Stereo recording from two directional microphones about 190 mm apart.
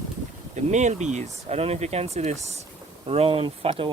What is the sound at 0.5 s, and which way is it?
Speech, 40° right (ahead or behind).